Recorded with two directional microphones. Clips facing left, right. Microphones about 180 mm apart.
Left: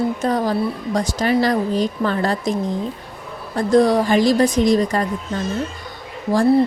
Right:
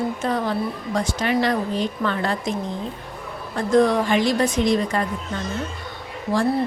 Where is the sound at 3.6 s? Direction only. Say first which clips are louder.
Left 3 dB; 35° left (ahead or behind).